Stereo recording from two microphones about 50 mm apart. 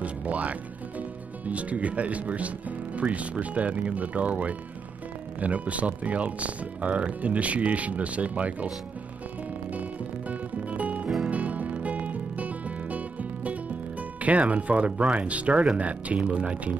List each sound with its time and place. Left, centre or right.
0.0 s music: right
3.0 s speech: right
9.7 s music: right
14.2 s speech: right